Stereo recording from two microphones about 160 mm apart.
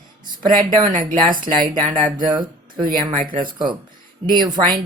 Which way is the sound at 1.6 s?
25° right (ahead or behind).